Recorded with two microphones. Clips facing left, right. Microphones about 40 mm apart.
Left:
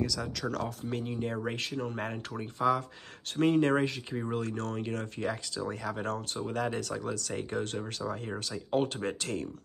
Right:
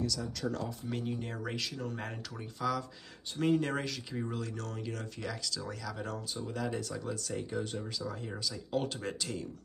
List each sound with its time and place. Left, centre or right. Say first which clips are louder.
0.2 s speech: left 2 dB; left
0.8 s speech: left 3 dB; left
3.3 s speech: left 5 dB; left
4.4 s speech: left 6 dB; left
8.5 s speech: left 4 dB; left